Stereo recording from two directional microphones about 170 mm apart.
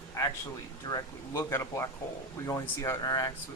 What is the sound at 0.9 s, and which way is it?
Speech, 20° left (ahead or behind).